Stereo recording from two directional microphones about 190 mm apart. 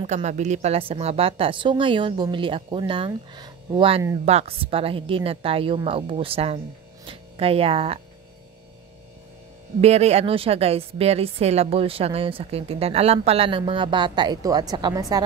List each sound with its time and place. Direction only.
0.0 s a woman's voice: 35° right (ahead or behind)
9.8 s a woman's voice: 35° right (ahead or behind)